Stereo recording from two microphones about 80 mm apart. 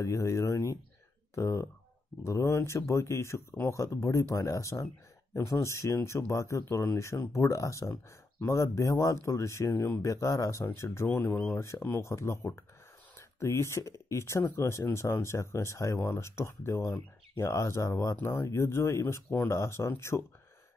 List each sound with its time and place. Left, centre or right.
0.0 s speech: left
11.3 s speech: centre
11.6 s speech: left